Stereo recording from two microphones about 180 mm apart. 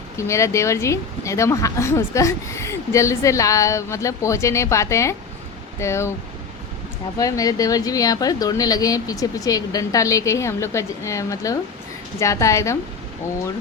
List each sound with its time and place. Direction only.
0.2 s speech: 15° left (ahead or behind)
7.2 s a woman's voice: 20° left (ahead or behind)